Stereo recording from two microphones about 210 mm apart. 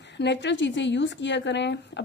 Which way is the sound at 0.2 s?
55° left (ahead or behind).